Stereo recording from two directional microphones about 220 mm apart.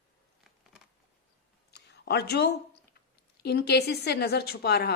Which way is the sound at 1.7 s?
50° left (ahead or behind).